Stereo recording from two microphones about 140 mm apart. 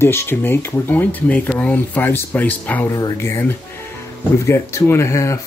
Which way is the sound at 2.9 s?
25° left (ahead or behind).